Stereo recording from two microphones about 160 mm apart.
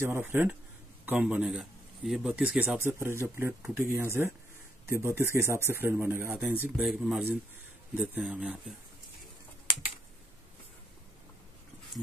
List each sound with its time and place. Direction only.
0.0 s speech: 15° right (ahead or behind)